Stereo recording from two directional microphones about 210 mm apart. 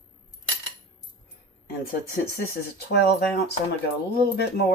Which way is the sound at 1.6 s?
45° left (ahead or behind).